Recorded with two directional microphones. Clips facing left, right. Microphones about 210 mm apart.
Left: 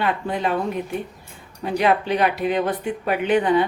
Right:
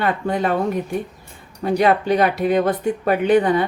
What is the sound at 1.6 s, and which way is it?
Speech, 45° right (ahead or behind).